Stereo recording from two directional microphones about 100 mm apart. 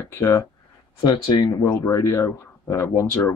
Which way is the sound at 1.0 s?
45° left (ahead or behind).